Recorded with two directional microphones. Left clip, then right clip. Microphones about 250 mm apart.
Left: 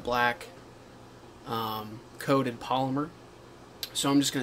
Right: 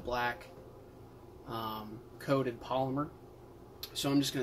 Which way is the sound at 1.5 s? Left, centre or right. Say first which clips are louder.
Left 7 dB; left.